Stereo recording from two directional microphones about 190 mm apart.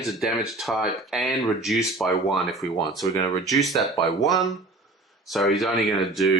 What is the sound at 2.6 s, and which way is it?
Speech, 20° left (ahead or behind).